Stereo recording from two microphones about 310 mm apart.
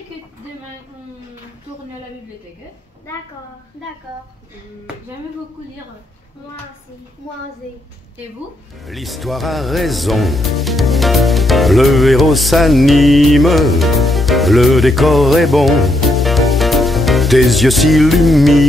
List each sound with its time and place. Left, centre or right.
8.8 s speech: centre